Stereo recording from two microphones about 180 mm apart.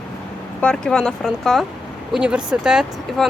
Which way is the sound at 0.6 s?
5° left (ahead or behind).